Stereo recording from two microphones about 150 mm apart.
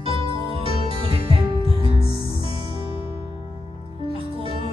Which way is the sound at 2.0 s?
35° left (ahead or behind).